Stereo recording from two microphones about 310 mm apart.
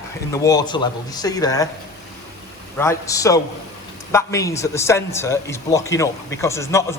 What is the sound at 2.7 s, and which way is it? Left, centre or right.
A man's voice, centre.